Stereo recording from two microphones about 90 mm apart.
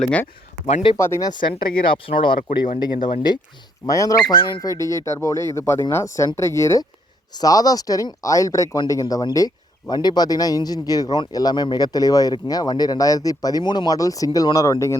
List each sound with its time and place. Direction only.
0.0 s speech: 15° left (ahead or behind)
0.9 s speech: 30° left (ahead or behind)
1.2 s speech: 55° left (ahead or behind)
1.9 s speech: 65° left (ahead or behind)
3.8 s speech: 35° left (ahead or behind)
7.3 s speech: 45° left (ahead or behind)
13.6 s speech: 55° left (ahead or behind); by 14.9 s 35° left (ahead or behind)